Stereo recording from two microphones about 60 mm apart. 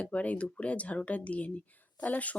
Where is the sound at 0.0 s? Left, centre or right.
Left.